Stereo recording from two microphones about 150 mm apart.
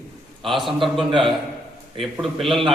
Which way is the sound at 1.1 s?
35° right (ahead or behind).